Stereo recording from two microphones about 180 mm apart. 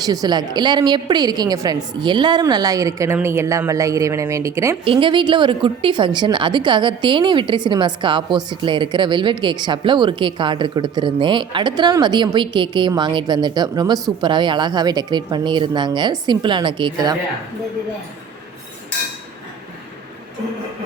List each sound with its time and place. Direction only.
0.0 s a woman's voice: 20° right (ahead or behind)
4.9 s a woman's voice: 30° right (ahead or behind)